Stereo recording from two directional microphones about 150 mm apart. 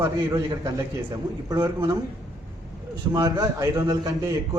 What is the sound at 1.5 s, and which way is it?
Speech, 25° right (ahead or behind).